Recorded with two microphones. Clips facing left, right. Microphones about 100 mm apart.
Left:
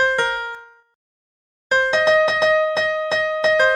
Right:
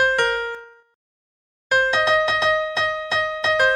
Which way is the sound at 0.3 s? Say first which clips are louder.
Right 2 dB; 20° left (ahead or behind).